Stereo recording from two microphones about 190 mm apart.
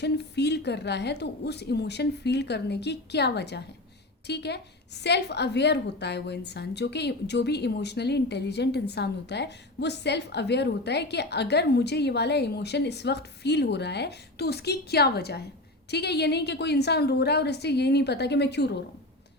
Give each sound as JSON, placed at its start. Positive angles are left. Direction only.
{"t": 0.0, "sound": "a woman's voice", "side_deg": 60}